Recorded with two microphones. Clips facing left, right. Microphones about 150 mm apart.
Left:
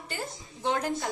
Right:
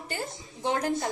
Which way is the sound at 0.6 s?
20° right (ahead or behind).